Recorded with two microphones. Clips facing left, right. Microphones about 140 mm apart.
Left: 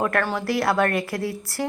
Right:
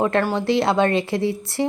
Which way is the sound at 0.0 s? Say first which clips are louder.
Right 4 dB; 20° right (ahead or behind).